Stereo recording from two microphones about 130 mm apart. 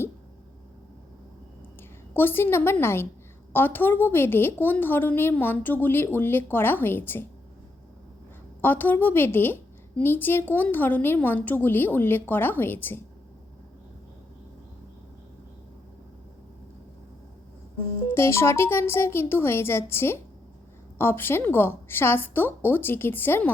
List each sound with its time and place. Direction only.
2.1 s a woman's voice: 15° left (ahead or behind)
8.6 s a woman's voice: 15° left (ahead or behind)
18.1 s a woman's voice: 20° left (ahead or behind)